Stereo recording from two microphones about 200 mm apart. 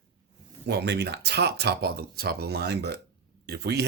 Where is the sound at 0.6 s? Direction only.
55° right (ahead or behind).